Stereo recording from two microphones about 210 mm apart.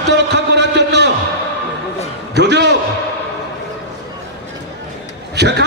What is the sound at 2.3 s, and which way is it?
Speech, 55° right (ahead or behind).